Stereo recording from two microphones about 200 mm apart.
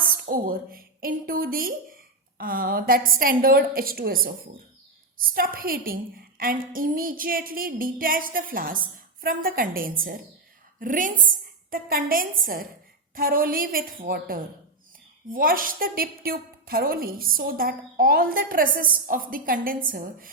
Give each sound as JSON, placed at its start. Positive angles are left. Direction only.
{"t": 0.1, "sound": "a woman's voice", "side_deg": -45}